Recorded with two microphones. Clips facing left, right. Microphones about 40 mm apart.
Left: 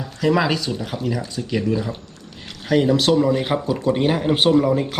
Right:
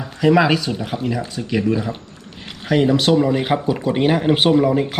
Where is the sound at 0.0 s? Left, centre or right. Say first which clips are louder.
Right 4 dB; centre.